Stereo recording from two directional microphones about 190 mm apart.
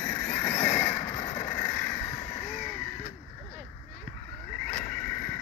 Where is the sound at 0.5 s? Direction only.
40° left (ahead or behind).